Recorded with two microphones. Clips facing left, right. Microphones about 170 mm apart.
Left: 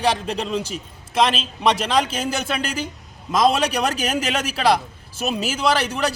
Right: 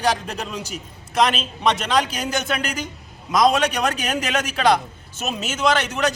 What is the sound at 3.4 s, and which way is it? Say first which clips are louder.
A man's voice: even; 10° left (ahead or behind).